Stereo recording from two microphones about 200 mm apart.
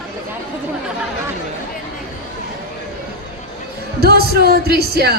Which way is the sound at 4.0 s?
50° right (ahead or behind).